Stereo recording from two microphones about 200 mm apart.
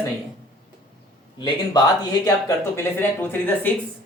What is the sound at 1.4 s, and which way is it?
Speech, 20° left (ahead or behind).